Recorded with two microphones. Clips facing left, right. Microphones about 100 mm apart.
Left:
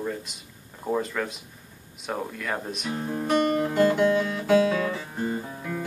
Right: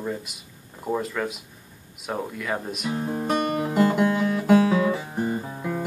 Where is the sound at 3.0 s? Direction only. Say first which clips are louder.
Left 2 dB; 20° right (ahead or behind).